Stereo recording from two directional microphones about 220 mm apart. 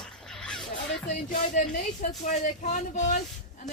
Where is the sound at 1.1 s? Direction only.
35° left (ahead or behind).